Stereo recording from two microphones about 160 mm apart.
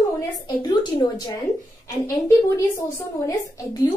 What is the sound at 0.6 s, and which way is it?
Speech, 25° left (ahead or behind).